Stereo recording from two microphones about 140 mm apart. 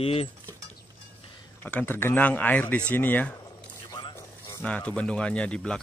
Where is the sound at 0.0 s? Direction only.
45° left (ahead or behind).